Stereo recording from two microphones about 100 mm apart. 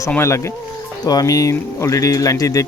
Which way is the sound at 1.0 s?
40° left (ahead or behind).